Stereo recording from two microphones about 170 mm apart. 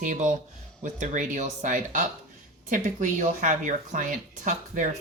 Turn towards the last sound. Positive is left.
turn(degrees=-50)  # may be behind; listen again after turning